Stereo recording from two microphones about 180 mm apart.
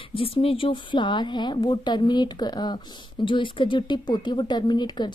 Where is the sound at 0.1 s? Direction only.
30° left (ahead or behind).